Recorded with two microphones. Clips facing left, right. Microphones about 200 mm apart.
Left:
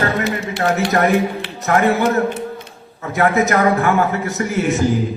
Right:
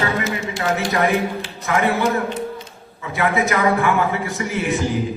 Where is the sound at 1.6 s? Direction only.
45° left (ahead or behind).